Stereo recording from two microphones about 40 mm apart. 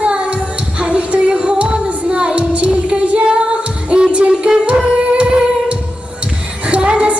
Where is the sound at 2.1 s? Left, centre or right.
Right.